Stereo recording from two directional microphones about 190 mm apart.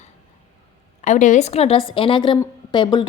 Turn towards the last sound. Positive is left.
turn(degrees=25)  # may be behind; listen again after turning